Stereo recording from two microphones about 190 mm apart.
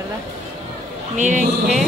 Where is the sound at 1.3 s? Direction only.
Centre (ahead or behind).